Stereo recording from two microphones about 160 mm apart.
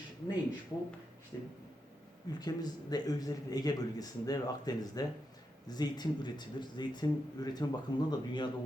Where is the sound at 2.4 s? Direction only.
25° left (ahead or behind).